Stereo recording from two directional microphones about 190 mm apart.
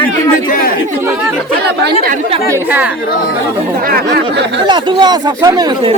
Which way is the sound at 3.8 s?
50° right (ahead or behind).